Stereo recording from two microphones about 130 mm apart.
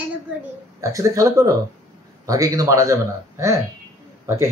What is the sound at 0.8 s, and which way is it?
A man's voice, 25° right (ahead or behind).